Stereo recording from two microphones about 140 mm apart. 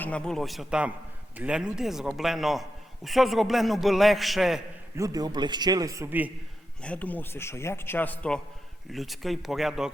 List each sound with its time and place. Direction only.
0.0 s a man's voice: 5° left (ahead or behind)
4.9 s a man's voice: 25° right (ahead or behind)
6.8 s a man's voice: 10° left (ahead or behind)
8.9 s a man's voice: centre (ahead or behind)